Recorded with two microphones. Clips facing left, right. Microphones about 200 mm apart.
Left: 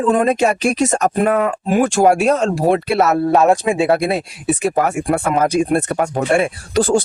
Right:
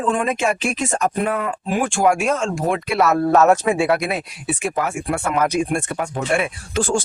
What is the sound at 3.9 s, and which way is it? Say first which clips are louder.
Speech: left 5 dB; 30° left (ahead or behind).